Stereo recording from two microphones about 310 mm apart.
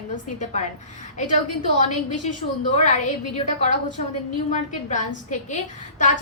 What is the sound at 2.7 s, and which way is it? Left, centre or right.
A woman's voice, left.